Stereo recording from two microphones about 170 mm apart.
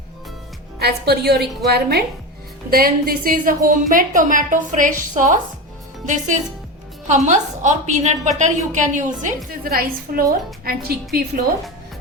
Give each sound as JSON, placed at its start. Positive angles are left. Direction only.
{"t": 0.8, "sound": "a woman's voice", "side_deg": -70}
{"t": 2.6, "sound": "a woman's voice", "side_deg": -60}
{"t": 9.6, "sound": "a woman's voice", "side_deg": -60}